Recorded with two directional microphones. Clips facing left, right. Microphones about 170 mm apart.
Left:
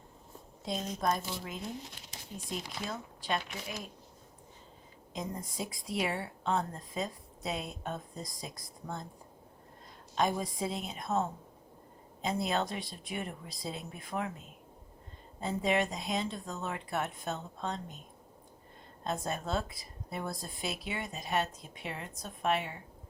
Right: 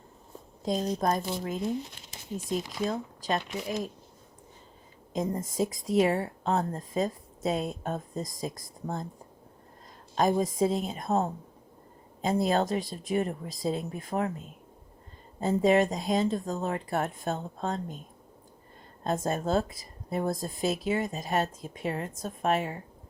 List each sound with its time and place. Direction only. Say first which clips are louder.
0.6 s speech: right 6 dB; 40° right (ahead or behind)
2.9 s speech: right 5 dB; 40° right (ahead or behind)
5.1 s speech: right 9 dB; 45° right (ahead or behind)
10.4 s speech: right 9 dB; 45° right (ahead or behind)
15.4 s speech: right 8 dB; 45° right (ahead or behind)
19.0 s speech: right 7 dB; 45° right (ahead or behind)